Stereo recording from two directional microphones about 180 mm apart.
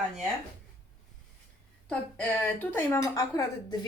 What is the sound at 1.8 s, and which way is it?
A woman's voice, 10° left (ahead or behind).